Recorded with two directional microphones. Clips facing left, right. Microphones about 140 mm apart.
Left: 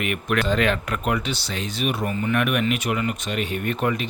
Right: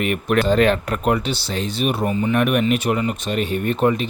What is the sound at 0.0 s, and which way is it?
Speech, 35° right (ahead or behind).